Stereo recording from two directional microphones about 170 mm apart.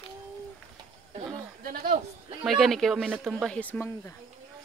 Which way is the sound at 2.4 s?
Centre (ahead or behind).